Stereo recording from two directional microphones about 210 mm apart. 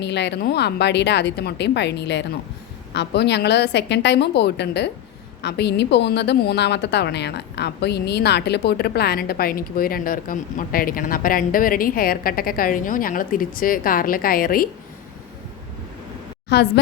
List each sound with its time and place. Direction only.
0.0 s a woman's voice: 55° left (ahead or behind)
16.5 s a woman's voice: 55° left (ahead or behind)